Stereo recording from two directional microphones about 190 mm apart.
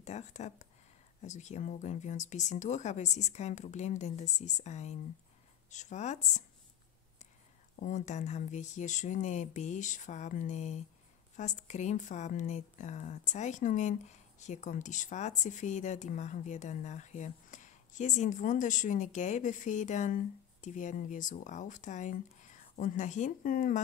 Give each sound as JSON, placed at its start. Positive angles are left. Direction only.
{"t": 0.0, "sound": "speech", "side_deg": 35}
{"t": 7.8, "sound": "speech", "side_deg": 40}